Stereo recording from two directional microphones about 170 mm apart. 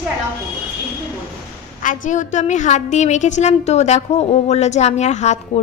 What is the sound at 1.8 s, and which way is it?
A woman's voice, 45° left (ahead or behind).